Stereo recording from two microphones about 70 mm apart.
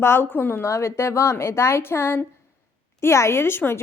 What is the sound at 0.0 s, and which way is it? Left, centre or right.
A woman's voice, left.